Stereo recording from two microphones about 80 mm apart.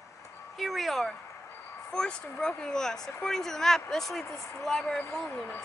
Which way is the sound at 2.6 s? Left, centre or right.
Centre.